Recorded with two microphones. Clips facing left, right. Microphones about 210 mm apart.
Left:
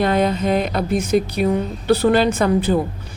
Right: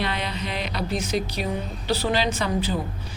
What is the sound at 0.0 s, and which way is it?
A woman's voice, 45° left (ahead or behind).